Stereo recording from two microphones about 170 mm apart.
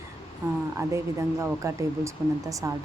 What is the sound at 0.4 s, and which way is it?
Speech, 15° right (ahead or behind).